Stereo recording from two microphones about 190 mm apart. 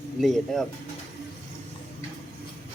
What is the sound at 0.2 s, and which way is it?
Speech, centre (ahead or behind).